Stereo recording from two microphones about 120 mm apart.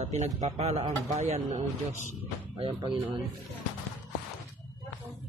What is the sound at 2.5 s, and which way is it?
Speech, 45° right (ahead or behind).